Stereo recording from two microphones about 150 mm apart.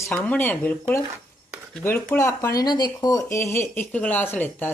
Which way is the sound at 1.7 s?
10° left (ahead or behind).